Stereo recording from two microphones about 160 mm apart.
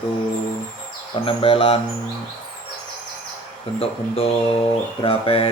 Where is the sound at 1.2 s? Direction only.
35° left (ahead or behind).